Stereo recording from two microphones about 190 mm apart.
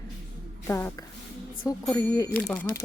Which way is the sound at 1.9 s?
20° left (ahead or behind).